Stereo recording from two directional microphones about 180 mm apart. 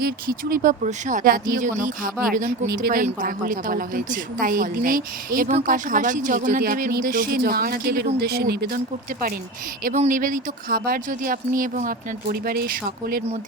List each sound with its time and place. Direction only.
0.0 s a woman's voice: 55° right (ahead or behind)
9.8 s a woman's voice: 45° right (ahead or behind)
12.3 s speech: 55° right (ahead or behind)